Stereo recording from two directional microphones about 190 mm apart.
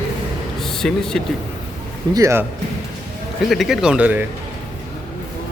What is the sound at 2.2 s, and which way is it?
Speech, 15° right (ahead or behind).